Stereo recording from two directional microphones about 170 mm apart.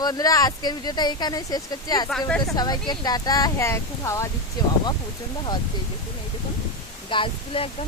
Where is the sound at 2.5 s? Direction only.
25° left (ahead or behind).